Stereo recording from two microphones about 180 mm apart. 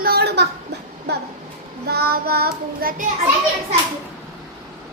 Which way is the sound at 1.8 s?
60° right (ahead or behind).